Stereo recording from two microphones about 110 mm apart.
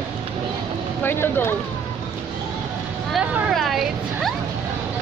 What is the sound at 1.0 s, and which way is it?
Speech, 20° left (ahead or behind).